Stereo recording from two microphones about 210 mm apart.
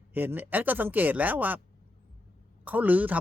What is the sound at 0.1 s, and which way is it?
Speech, 10° right (ahead or behind).